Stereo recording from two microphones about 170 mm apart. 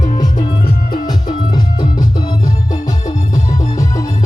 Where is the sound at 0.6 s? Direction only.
55° left (ahead or behind).